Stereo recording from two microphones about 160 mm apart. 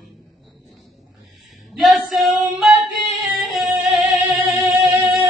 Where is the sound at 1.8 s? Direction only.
Centre (ahead or behind).